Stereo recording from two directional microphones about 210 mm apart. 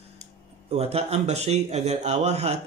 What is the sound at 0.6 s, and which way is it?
A man's voice, 30° right (ahead or behind).